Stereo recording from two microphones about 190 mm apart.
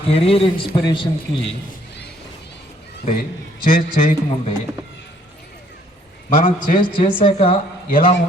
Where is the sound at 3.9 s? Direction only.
45° left (ahead or behind).